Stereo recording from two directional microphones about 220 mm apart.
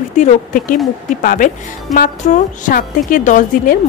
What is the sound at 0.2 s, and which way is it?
A woman's voice, 35° left (ahead or behind).